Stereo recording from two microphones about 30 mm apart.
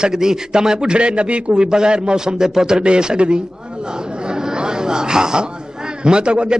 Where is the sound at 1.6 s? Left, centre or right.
Right.